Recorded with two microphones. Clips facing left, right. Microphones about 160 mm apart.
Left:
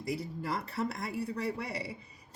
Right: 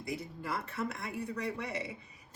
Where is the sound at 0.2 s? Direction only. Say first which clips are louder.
Left 3 dB; 35° left (ahead or behind).